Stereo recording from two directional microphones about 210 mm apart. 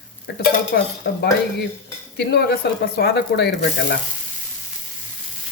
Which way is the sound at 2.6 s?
50° left (ahead or behind).